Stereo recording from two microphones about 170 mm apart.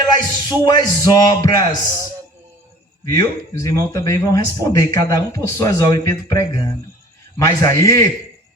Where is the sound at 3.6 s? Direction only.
20° left (ahead or behind).